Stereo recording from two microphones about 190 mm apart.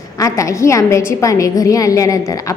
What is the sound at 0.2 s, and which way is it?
A woman's voice, 15° left (ahead or behind).